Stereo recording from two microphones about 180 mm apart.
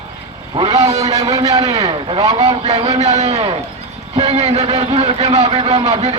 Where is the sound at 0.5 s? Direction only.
25° right (ahead or behind).